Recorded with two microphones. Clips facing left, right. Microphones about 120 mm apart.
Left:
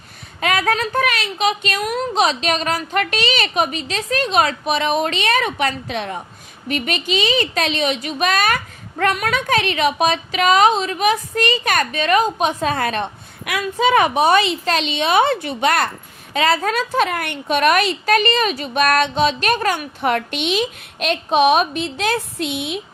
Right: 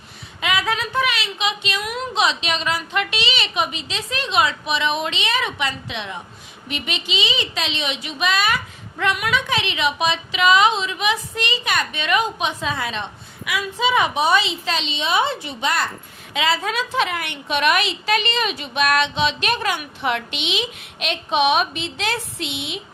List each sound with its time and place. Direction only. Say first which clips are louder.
0.3 s a woman's voice: left 4 dB; 45° left (ahead or behind)
16.3 s a woman's voice: left 4 dB; 45° left (ahead or behind)